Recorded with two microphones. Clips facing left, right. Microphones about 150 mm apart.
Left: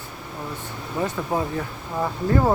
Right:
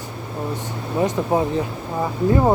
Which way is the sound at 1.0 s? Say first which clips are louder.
Right 5 dB; 25° right (ahead or behind).